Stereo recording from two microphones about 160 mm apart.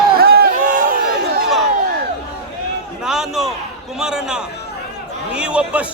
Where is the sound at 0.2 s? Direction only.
75° right (ahead or behind); by 0.9 s 55° right (ahead or behind).